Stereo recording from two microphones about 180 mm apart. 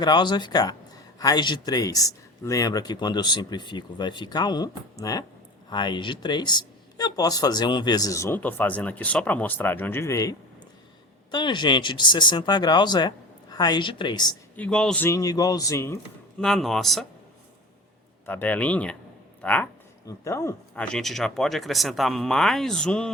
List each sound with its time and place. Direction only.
0.0 s a man's voice: 25° left (ahead or behind)
14.5 s speech: 5° left (ahead or behind)
16.4 s speech: centre (ahead or behind)
18.3 s speech: 10° left (ahead or behind)